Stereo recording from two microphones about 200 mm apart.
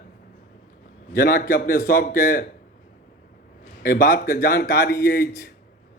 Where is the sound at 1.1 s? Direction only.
45° left (ahead or behind).